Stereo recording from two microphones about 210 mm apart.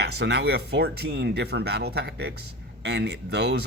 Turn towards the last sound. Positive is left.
turn(degrees=-55)  # may be behind; listen again after turning